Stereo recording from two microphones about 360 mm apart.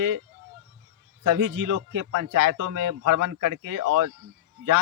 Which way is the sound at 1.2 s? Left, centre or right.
Right.